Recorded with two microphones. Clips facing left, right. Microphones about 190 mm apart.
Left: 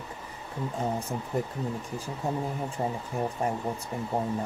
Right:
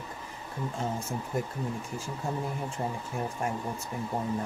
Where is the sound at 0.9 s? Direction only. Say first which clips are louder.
Left 2 dB; 35° left (ahead or behind).